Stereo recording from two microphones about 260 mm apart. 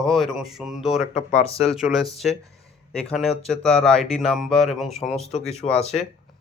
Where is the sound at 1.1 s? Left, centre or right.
Left.